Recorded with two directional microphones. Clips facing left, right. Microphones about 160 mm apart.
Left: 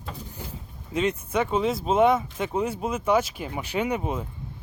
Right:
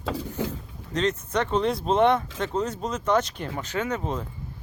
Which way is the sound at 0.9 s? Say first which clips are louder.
Even; 10° left (ahead or behind).